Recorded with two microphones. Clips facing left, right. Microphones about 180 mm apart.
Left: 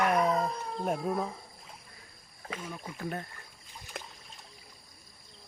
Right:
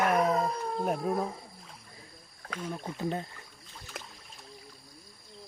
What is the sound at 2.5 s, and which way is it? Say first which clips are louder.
Speech: right 3 dB; 10° left (ahead or behind).